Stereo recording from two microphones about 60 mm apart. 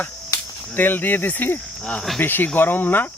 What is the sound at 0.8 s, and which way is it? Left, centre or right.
Speech, left.